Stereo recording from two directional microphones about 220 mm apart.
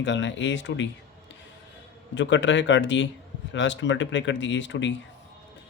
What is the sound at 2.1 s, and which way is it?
A man's voice, 55° left (ahead or behind).